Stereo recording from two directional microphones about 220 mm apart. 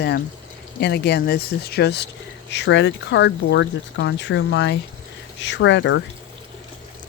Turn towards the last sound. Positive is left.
turn(degrees=55)  # may be behind; listen again after turning